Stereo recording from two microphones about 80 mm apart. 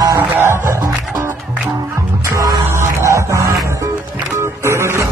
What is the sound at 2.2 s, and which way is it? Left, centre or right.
Music, right.